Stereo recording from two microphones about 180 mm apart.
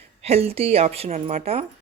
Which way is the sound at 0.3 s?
35° right (ahead or behind).